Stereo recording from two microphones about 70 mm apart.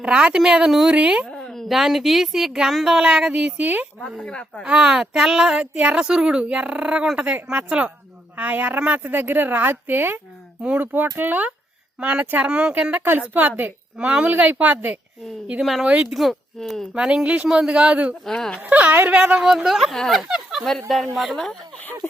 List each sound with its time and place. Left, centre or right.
0.0 s speech: centre
1.3 s a sound: centre
1.6 s speech: centre
4.2 s speech: centre
4.6 s a woman's voice: centre
12.5 s speech: centre
13.1 s a woman's voice: right
15.6 s speech: centre
15.9 s speech: centre
16.1 s speech: centre
16.9 s speech: centre
18.3 s speech: centre
18.6 s a woman's voice: right; by 21.6 s centre